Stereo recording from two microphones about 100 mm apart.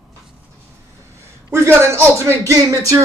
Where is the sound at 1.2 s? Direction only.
25° right (ahead or behind).